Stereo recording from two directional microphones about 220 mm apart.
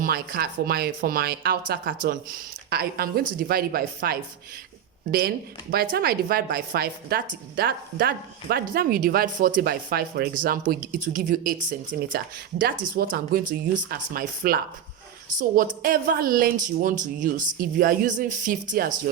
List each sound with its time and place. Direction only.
0.0 s speech: 45° right (ahead or behind)
5.7 s speech: 45° right (ahead or behind)